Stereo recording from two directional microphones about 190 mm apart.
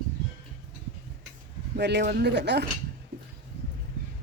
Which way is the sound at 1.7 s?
60° right (ahead or behind).